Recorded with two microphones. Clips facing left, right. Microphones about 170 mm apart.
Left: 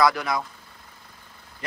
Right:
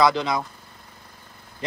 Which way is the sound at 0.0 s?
20° right (ahead or behind).